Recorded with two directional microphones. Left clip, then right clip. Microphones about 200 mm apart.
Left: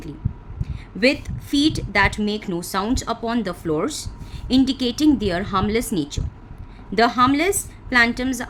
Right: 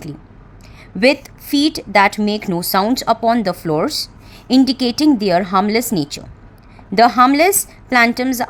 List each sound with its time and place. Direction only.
0.6 s a woman's voice: 30° right (ahead or behind)